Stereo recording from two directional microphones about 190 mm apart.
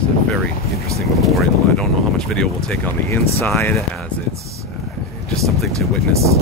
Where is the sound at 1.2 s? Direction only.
Centre (ahead or behind).